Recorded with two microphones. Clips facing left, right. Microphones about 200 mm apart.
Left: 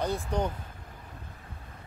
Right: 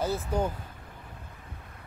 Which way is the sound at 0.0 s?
5° right (ahead or behind).